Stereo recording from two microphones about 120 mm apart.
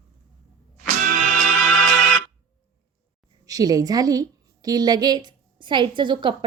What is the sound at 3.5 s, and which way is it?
A woman's voice, 30° right (ahead or behind).